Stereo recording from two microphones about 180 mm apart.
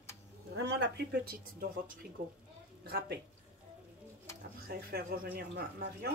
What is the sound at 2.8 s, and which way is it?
Speech, 65° right (ahead or behind).